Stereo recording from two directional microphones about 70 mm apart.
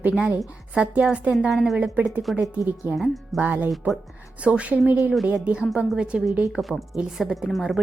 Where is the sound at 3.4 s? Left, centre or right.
Right.